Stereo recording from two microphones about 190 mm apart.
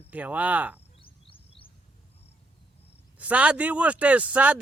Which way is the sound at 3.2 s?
5° right (ahead or behind).